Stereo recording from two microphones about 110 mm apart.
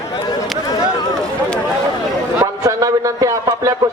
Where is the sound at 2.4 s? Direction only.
30° right (ahead or behind).